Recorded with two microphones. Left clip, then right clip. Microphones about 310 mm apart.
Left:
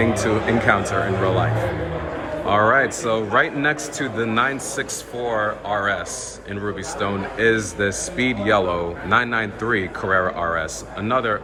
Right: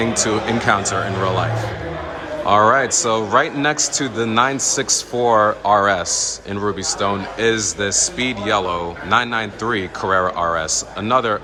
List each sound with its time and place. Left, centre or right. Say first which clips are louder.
0.0 s a man's voice: right 1 dB; centre
2.5 s a man's voice: right 3 dB; centre